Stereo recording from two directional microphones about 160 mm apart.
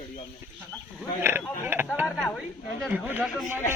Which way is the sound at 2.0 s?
Centre (ahead or behind).